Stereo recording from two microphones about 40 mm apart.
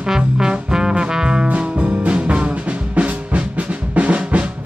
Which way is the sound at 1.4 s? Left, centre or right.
Right.